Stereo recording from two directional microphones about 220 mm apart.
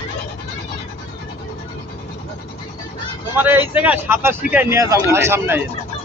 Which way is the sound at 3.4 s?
10° right (ahead or behind).